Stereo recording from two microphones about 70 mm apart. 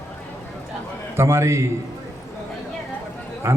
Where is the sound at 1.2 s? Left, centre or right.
Right.